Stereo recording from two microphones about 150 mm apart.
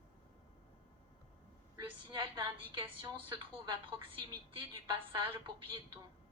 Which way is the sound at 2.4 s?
30° right (ahead or behind).